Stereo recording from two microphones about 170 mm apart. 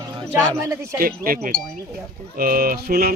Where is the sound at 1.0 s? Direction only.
60° right (ahead or behind).